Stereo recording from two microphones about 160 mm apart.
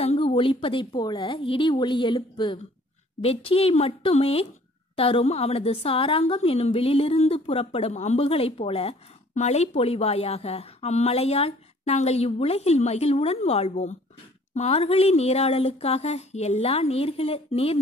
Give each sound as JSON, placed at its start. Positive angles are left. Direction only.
{"t": 0.0, "sound": "a woman's voice", "side_deg": 35}